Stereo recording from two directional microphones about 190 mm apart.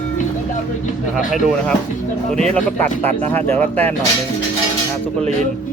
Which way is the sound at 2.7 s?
10° left (ahead or behind).